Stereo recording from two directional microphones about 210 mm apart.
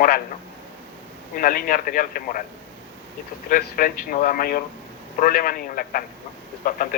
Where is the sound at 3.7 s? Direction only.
40° left (ahead or behind).